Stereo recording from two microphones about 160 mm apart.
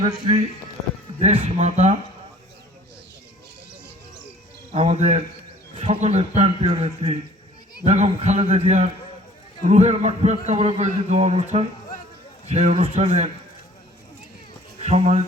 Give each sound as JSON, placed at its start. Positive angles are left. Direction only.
{"t": 0.0, "sound": "a man's voice", "side_deg": -25}
{"t": 1.2, "sound": "a man's voice", "side_deg": -40}
{"t": 4.7, "sound": "a man's voice", "side_deg": -40}
{"t": 14.8, "sound": "speech", "side_deg": -40}